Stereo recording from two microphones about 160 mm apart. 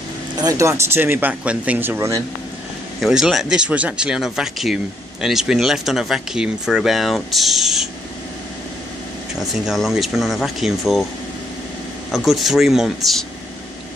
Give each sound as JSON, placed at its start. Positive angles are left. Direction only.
{"t": 0.4, "sound": "speech", "side_deg": -20}
{"t": 3.0, "sound": "speech", "side_deg": -5}
{"t": 9.4, "sound": "speech", "side_deg": 0}
{"t": 12.1, "sound": "speech", "side_deg": 0}